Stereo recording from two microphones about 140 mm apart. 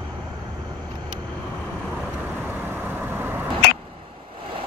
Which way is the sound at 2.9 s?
15° right (ahead or behind).